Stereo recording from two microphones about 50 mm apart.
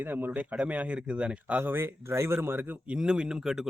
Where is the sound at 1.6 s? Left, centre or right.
Right.